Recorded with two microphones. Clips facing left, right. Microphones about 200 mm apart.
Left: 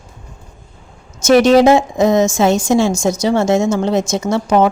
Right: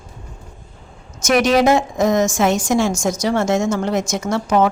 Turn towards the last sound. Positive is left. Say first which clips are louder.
# left 3 dB
turn(degrees=25)  # may be behind; listen again after turning